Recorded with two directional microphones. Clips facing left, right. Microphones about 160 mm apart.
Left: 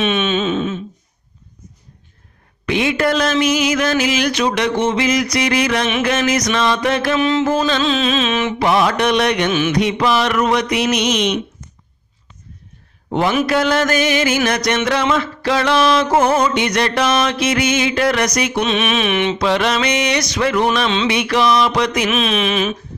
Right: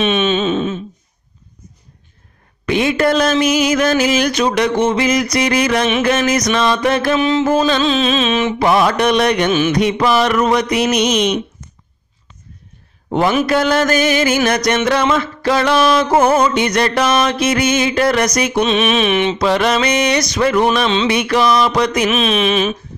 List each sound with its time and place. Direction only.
0.0 s wail: 30° right (ahead or behind)
2.6 s mantra: 40° right (ahead or behind)
7.2 s music: 20° right (ahead or behind)
8.6 s mantra: 45° right (ahead or behind)
9.8 s mantra: 45° right (ahead or behind)
13.1 s mantra: 45° right (ahead or behind)
19.3 s mantra: 45° right (ahead or behind)
22.1 s music: 25° right (ahead or behind)